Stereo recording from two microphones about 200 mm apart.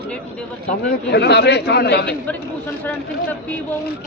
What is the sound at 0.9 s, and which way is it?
Speech, 55° left (ahead or behind).